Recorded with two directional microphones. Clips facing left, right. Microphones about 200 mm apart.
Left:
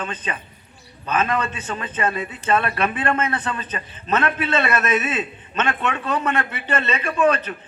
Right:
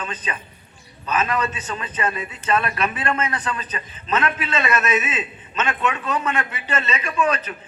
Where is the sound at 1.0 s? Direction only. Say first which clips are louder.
Left 1 dB; 55° left (ahead or behind).